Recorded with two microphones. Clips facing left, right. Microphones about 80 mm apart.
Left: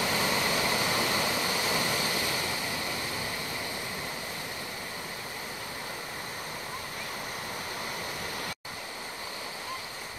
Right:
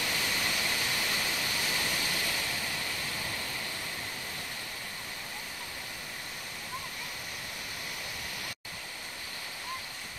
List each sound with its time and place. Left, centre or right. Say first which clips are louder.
0.1 s waterfall: left 5 dB; left